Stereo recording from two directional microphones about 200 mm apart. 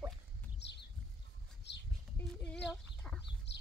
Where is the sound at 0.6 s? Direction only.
60° left (ahead or behind).